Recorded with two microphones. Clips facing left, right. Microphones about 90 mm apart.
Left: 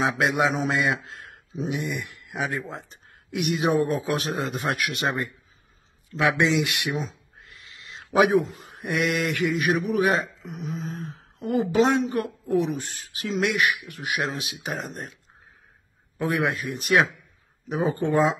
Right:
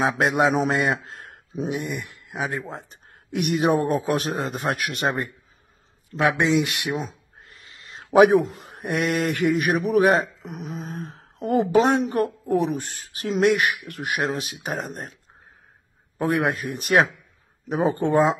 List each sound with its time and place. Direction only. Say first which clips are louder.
0.0 s speech: right 2 dB; 40° right (ahead or behind)
1.0 s a sound: right 1 dB; 45° right (ahead or behind)
2.5 s speech: right 1 dB; 45° right (ahead or behind)
7.0 s a sound: even; 50° right (ahead or behind)
9.3 s speech: right 2 dB; 55° right (ahead or behind)
10.4 s speech: even; 60° right (ahead or behind); by 15.1 s 45° right (ahead or behind)
16.2 s speech: right 2 dB; 40° right (ahead or behind)